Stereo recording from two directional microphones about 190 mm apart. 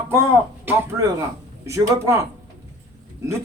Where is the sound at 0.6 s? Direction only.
10° right (ahead or behind).